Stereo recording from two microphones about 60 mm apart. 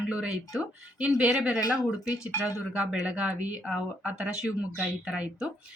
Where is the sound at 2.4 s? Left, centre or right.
Centre.